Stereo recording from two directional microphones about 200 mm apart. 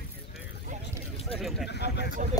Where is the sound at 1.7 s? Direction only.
55° left (ahead or behind).